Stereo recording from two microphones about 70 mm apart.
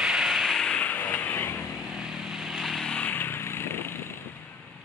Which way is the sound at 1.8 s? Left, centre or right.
Centre.